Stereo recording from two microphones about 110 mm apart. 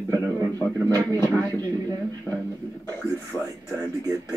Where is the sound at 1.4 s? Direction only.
20° left (ahead or behind).